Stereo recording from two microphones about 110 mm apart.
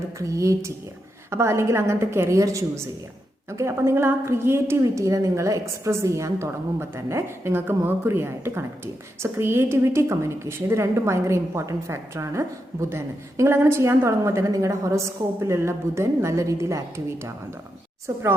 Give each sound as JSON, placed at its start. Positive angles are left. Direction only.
{"t": 0.2, "sound": "a woman's voice", "side_deg": -30}
{"t": 18.0, "sound": "a woman's voice", "side_deg": -25}